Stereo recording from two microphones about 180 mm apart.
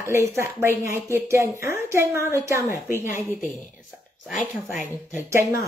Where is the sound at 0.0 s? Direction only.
15° right (ahead or behind).